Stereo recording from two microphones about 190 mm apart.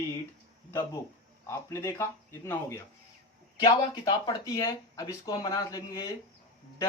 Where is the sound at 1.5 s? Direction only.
15° left (ahead or behind).